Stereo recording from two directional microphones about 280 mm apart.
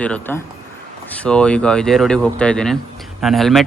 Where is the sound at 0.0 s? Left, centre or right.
Centre.